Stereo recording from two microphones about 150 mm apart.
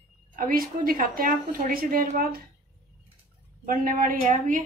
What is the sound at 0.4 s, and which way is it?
A woman's voice, 75° right (ahead or behind).